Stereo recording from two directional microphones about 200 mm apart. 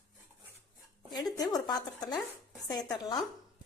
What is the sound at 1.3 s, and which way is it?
Speech, 20° left (ahead or behind).